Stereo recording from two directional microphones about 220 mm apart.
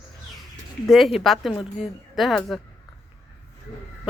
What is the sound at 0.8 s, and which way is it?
Speech, centre (ahead or behind).